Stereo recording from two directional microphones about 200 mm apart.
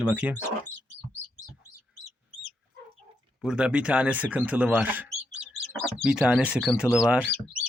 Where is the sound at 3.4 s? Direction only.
5° right (ahead or behind).